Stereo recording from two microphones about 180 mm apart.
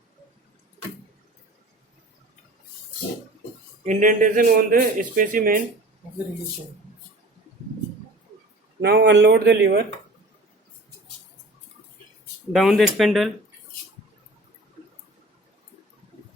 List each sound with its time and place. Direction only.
3.8 s a man's voice: 45° right (ahead or behind)
8.8 s speech: 65° right (ahead or behind)
12.5 s speech: centre (ahead or behind)